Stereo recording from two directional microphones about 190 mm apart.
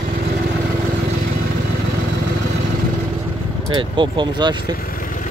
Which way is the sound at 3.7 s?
25° right (ahead or behind).